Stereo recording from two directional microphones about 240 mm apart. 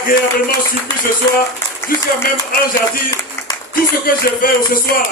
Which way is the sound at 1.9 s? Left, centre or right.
Left.